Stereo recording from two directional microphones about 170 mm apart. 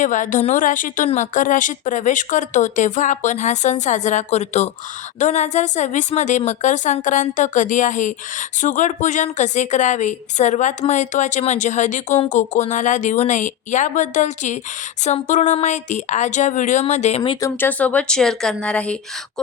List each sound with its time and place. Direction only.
0.0 s a woman's voice: 50° left (ahead or behind)
17.4 s speech: 10° left (ahead or behind)